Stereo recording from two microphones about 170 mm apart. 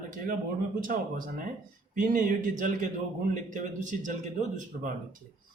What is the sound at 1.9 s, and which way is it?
Speech, 50° right (ahead or behind).